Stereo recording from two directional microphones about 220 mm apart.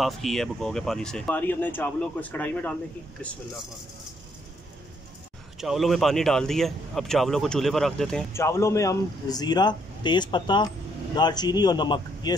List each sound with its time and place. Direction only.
0.0 s a man's voice: centre (ahead or behind)
5.6 s a man's voice: centre (ahead or behind); by 12.4 s 20° left (ahead or behind)